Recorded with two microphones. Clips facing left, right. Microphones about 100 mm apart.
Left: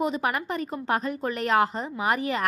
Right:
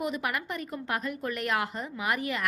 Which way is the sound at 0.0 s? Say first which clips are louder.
Left 5 dB; 30° left (ahead or behind).